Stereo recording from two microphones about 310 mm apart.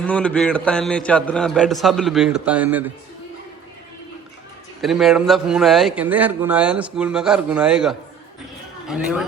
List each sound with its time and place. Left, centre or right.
0.0 s a man's voice: centre
4.8 s a man's voice: centre